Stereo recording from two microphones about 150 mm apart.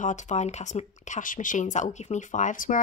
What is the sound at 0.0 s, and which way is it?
Speech, 55° left (ahead or behind).